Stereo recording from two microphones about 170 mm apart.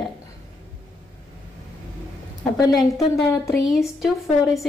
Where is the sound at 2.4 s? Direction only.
20° left (ahead or behind).